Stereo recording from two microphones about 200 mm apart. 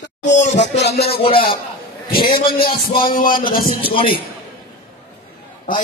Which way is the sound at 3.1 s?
45° left (ahead or behind).